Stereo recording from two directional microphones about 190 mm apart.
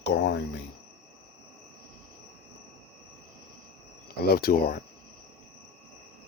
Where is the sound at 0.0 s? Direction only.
65° left (ahead or behind).